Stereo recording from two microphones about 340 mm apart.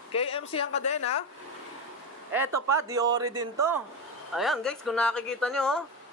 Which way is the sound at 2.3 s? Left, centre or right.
Centre.